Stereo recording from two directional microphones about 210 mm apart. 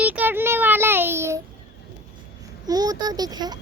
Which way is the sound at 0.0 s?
10° right (ahead or behind).